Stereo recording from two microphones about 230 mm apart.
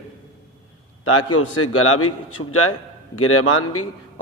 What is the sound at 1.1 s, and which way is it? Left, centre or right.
A man's voice, left.